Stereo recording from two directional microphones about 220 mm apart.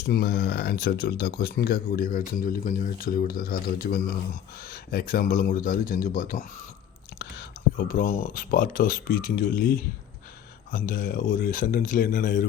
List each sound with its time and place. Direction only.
0.1 s speech: 45° left (ahead or behind)